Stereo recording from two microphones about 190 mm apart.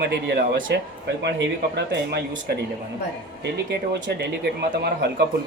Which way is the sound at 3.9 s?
60° right (ahead or behind).